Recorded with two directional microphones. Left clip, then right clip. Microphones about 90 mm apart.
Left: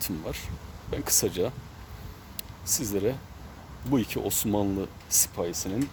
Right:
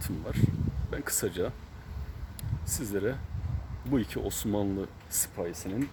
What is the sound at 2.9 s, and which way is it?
Speech, centre (ahead or behind).